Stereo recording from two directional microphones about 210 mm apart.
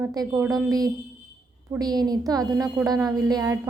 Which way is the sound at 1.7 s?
20° right (ahead or behind).